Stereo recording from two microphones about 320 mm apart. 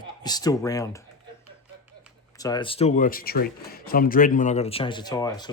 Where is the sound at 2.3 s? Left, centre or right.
Centre.